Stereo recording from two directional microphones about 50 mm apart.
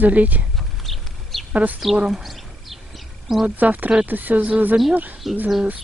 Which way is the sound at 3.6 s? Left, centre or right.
Right.